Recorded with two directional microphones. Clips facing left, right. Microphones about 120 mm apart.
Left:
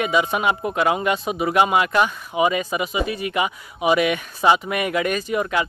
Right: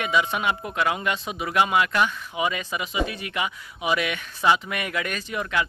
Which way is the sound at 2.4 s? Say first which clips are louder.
Left 7 dB; 10° left (ahead or behind).